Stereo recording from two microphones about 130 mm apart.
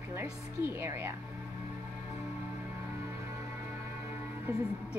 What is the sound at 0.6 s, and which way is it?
Speech, 20° right (ahead or behind).